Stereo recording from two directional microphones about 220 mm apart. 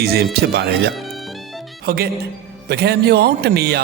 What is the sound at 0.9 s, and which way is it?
Music, centre (ahead or behind).